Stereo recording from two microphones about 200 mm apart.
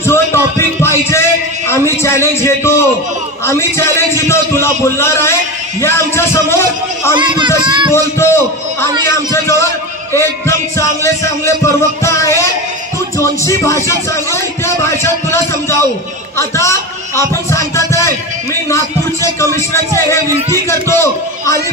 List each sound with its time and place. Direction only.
0.0 s music: 15° left (ahead or behind)
0.6 s a sound: 15° left (ahead or behind)
3.4 s a man's voice: 15° left (ahead or behind)
7.2 s a child's voice: 25° right (ahead or behind)
7.9 s a man's voice: 15° left (ahead or behind)
20.6 s a man's voice: 15° left (ahead or behind)